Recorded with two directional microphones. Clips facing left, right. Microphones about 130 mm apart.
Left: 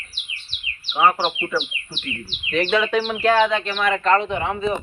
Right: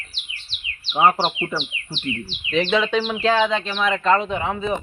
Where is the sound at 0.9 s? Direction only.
25° right (ahead or behind).